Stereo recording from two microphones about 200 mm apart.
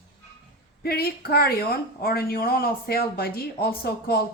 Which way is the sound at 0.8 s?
50° left (ahead or behind).